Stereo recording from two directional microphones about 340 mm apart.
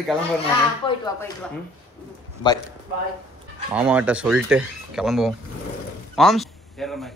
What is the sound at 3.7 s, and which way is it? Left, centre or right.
A man's voice, centre.